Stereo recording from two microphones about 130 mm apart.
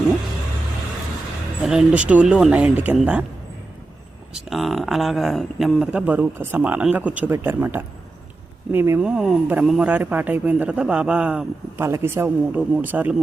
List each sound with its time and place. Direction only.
1.6 s a man's voice: 5° right (ahead or behind)
4.4 s speech: centre (ahead or behind)
5.9 s a man's voice: 10° right (ahead or behind)
11.8 s a man's voice: 20° right (ahead or behind)